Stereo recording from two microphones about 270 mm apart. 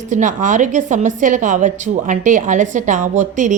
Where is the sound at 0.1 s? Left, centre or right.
Right.